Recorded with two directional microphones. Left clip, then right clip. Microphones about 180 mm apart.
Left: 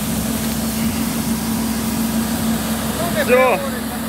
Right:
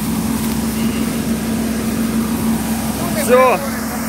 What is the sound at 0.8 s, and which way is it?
Vehicle, 60° left (ahead or behind).